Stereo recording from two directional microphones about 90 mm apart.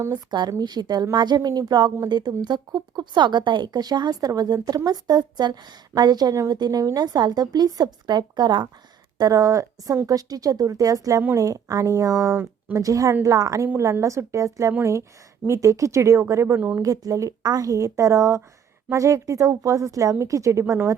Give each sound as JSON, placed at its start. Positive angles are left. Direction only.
{"t": 0.1, "sound": "a woman's voice", "side_deg": -50}
{"t": 16.6, "sound": "speech", "side_deg": -20}
{"t": 16.8, "sound": "speech", "side_deg": -40}